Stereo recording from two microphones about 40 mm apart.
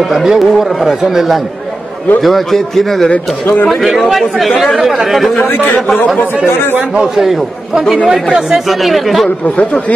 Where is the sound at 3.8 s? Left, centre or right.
Centre.